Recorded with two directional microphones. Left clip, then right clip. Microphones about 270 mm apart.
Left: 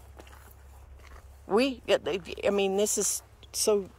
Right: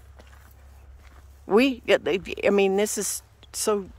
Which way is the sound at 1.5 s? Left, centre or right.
Centre.